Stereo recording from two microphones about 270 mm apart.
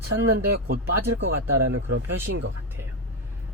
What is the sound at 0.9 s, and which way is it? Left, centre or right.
Speech, right.